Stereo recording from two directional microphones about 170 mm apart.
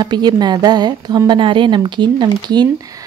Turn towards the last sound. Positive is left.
turn(degrees=-25)  # may be behind; listen again after turning